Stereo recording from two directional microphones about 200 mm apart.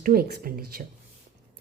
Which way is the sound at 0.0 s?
50° right (ahead or behind).